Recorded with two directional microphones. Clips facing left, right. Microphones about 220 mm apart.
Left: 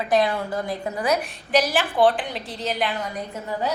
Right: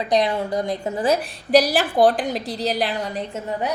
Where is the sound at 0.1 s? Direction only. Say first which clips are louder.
Right 1 dB; 20° right (ahead or behind).